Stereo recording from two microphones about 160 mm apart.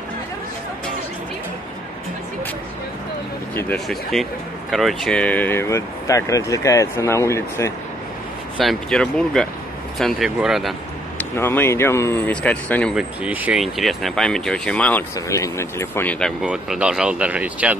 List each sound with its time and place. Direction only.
3.5 s speech: 10° left (ahead or behind)
8.5 s speech: 5° left (ahead or behind)
11.3 s speech: 15° left (ahead or behind)
12.9 s speech: 10° right (ahead or behind); by 15.0 s 10° left (ahead or behind)
15.1 s speech: 20° left (ahead or behind)
16.4 s speech: 5° right (ahead or behind)